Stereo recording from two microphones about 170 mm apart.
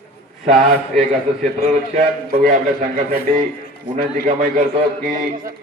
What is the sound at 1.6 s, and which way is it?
A man's voice, 60° right (ahead or behind).